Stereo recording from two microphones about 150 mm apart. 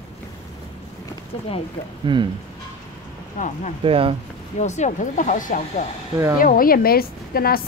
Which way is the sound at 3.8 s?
40° right (ahead or behind).